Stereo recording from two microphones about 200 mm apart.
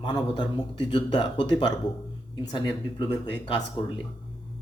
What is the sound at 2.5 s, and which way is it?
A man's voice, 20° left (ahead or behind).